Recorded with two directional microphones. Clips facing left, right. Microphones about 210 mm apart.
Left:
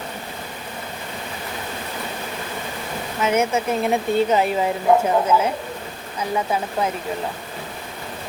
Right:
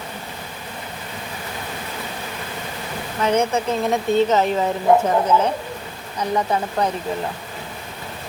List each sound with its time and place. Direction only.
3.2 s speech: 5° left (ahead or behind)
6.5 s speech: 5° left (ahead or behind)